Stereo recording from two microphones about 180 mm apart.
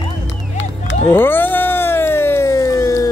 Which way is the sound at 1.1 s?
10° left (ahead or behind).